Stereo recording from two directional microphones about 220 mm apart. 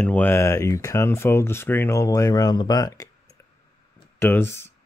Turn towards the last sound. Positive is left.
turn(degrees=10)  # may be behind; listen again after turning